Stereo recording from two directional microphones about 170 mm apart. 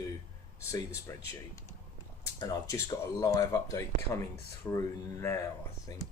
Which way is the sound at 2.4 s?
20° left (ahead or behind).